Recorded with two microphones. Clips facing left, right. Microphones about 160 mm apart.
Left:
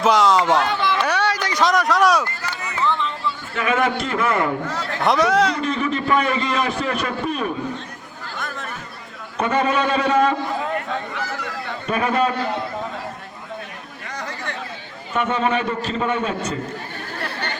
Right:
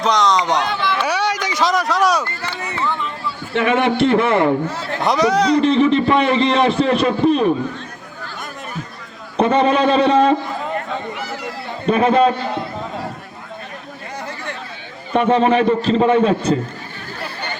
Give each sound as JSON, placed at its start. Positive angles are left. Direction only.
{"t": 0.0, "sound": "speech", "side_deg": 5}
{"t": 1.2, "sound": "a sound", "side_deg": -20}
{"t": 1.5, "sound": "a sound", "side_deg": 0}
{"t": 3.5, "sound": "a man's voice", "side_deg": -30}
{"t": 5.0, "sound": "speech", "side_deg": 0}
{"t": 5.5, "sound": "a man's voice", "side_deg": -30}
{"t": 9.4, "sound": "a man's voice", "side_deg": -30}
{"t": 11.1, "sound": "a sound", "side_deg": -15}
{"t": 11.9, "sound": "a man's voice", "side_deg": -30}
{"t": 14.2, "sound": "chatter", "side_deg": -20}
{"t": 15.1, "sound": "a man's voice", "side_deg": -30}